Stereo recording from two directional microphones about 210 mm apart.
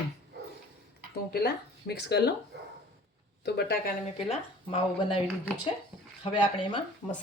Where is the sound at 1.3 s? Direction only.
50° left (ahead or behind).